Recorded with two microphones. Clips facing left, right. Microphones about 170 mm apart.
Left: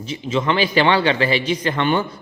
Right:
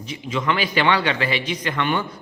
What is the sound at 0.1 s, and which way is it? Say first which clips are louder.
Speech: left 3 dB; 25° left (ahead or behind).